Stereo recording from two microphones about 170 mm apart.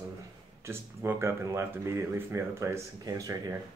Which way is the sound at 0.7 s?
15° right (ahead or behind).